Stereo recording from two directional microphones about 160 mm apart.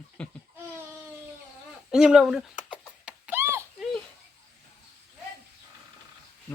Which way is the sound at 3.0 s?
10° right (ahead or behind).